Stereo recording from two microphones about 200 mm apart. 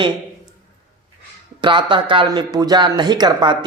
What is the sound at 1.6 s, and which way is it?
Speech, 25° right (ahead or behind).